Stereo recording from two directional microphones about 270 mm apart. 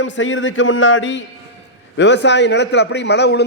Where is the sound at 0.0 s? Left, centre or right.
Left.